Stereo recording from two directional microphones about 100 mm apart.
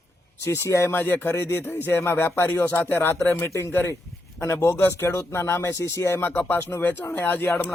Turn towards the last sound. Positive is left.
turn(degrees=20)  # may be behind; listen again after turning